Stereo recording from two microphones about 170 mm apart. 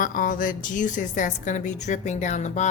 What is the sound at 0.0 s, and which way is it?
A woman's voice, 55° left (ahead or behind).